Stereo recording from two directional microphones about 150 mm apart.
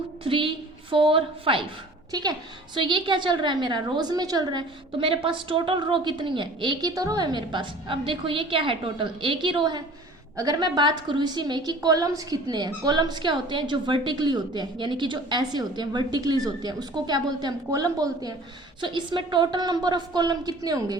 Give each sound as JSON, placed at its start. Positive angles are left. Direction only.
{"t": 0.3, "sound": "a woman's voice", "side_deg": -35}
{"t": 2.7, "sound": "a woman's voice", "side_deg": -30}